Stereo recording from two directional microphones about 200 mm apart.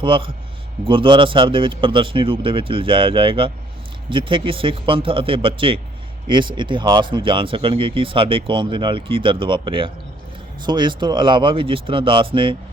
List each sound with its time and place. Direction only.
0.0 s speech: 25° right (ahead or behind)